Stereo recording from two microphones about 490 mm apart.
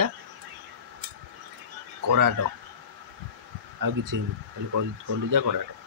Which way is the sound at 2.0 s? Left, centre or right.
Right.